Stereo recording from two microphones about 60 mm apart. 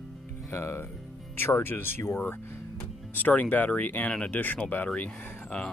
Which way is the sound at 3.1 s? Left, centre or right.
Left.